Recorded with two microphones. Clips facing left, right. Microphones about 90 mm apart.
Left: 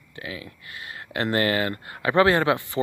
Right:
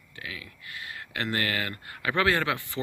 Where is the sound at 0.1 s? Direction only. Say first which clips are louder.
Left 5 dB; 30° left (ahead or behind).